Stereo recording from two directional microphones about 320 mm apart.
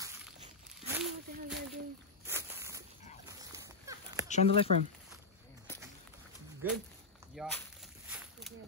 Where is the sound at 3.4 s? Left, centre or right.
Centre.